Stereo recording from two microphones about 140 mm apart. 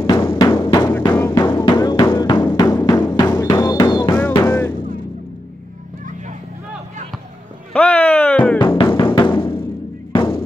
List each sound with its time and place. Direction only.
0.2 s music: 20° left (ahead or behind)
0.5 s music: 35° left (ahead or behind)
4.5 s music: 15° left (ahead or behind)
7.7 s a sound: 10° left (ahead or behind)
8.5 s music: 35° left (ahead or behind)